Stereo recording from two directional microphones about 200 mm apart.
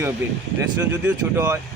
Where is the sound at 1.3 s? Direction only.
10° right (ahead or behind).